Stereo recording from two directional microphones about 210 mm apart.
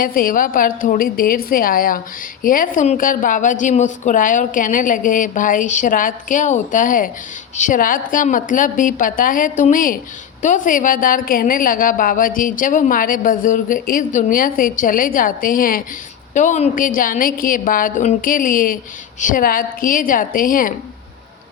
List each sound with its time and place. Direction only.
0.0 s a woman's voice: 40° left (ahead or behind)